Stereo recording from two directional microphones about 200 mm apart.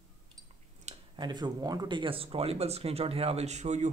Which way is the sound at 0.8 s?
25° right (ahead or behind).